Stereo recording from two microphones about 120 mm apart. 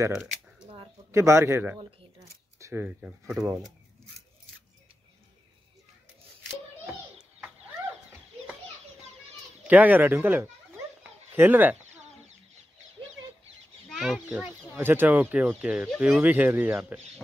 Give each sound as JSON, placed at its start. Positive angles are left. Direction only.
{"t": 0.1, "sound": "shuffling cards", "side_deg": -5}
{"t": 1.1, "sound": "a man's voice", "side_deg": -25}
{"t": 1.8, "sound": "speech", "side_deg": -50}
{"t": 2.1, "sound": "shuffling cards", "side_deg": -20}
{"t": 6.9, "sound": "bird", "side_deg": -10}
{"t": 9.7, "sound": "speech", "side_deg": -15}
{"t": 13.8, "sound": "speech", "side_deg": 0}
{"t": 14.8, "sound": "speech", "side_deg": -15}